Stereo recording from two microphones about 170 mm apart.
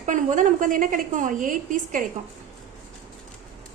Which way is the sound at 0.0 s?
45° right (ahead or behind).